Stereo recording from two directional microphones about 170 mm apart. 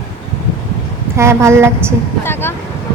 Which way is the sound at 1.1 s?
15° right (ahead or behind).